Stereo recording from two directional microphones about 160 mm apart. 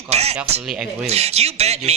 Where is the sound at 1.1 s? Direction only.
40° right (ahead or behind).